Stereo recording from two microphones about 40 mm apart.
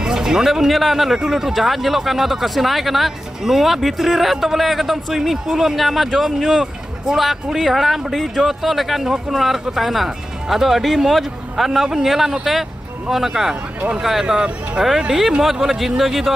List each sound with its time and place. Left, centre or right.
0.0 s a sound: centre
0.7 s speech: centre
7.5 s speech: centre
13.7 s speech: right
15.4 s speech: centre